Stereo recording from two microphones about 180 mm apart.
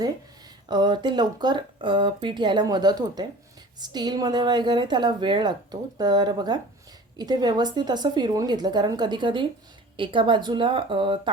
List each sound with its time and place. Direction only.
0.7 s speech: 25° right (ahead or behind)